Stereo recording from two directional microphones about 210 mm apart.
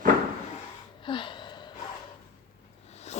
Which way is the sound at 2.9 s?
30° left (ahead or behind).